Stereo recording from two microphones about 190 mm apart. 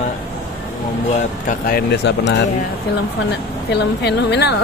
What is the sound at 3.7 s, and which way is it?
Speech, 60° left (ahead or behind).